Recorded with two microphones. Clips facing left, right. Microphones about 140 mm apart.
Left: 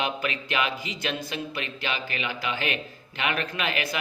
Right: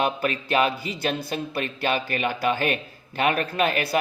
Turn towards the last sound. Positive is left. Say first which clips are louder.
# right 6 dB
turn(degrees=-40)  # may be behind; listen again after turning